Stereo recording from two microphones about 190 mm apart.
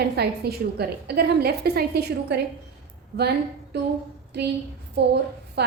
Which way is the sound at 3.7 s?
60° right (ahead or behind).